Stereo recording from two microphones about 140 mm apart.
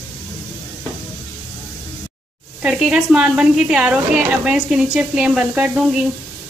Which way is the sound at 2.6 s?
5° right (ahead or behind).